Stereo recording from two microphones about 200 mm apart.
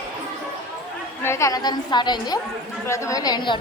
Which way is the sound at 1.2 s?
15° left (ahead or behind).